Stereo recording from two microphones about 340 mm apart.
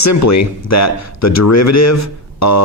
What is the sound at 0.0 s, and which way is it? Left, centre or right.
Speech, left.